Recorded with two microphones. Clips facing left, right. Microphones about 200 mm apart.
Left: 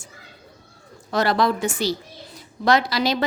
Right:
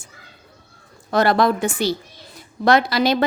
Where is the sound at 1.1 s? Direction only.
55° right (ahead or behind).